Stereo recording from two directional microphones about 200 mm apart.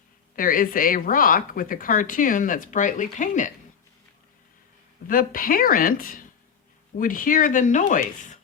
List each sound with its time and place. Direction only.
0.3 s speech: 45° left (ahead or behind)
5.0 s speech: 45° left (ahead or behind)